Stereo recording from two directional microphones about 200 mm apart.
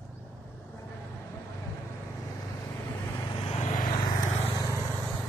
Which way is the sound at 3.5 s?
40° left (ahead or behind).